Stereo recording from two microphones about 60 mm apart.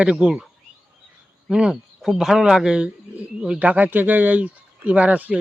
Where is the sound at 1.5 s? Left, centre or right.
Centre.